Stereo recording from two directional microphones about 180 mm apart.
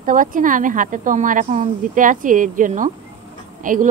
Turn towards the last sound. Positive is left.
turn(degrees=-45)  # may be behind; listen again after turning